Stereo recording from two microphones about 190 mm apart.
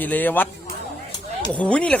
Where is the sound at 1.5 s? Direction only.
5° left (ahead or behind).